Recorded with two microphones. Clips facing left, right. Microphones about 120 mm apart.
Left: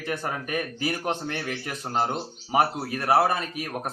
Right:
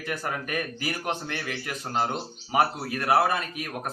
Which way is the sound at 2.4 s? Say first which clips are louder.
Left 1 dB; 15° left (ahead or behind).